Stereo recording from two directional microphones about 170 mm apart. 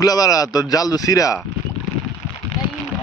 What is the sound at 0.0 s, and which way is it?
Speech, 20° left (ahead or behind).